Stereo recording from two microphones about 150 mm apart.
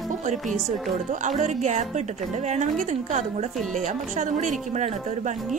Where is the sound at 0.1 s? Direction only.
55° right (ahead or behind).